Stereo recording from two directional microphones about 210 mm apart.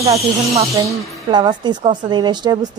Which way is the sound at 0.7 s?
15° right (ahead or behind).